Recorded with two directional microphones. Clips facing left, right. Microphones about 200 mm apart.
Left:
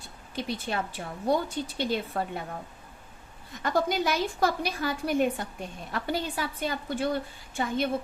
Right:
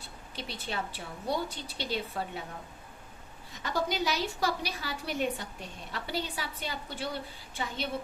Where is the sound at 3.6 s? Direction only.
55° left (ahead or behind).